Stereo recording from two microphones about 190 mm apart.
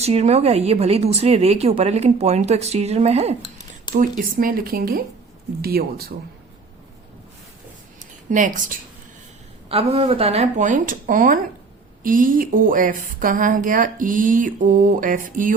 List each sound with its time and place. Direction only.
0.0 s speech: 35° right (ahead or behind)
3.9 s a woman's voice: 45° right (ahead or behind)
8.3 s a woman's voice: 45° right (ahead or behind)
9.6 s a woman's voice: 30° right (ahead or behind)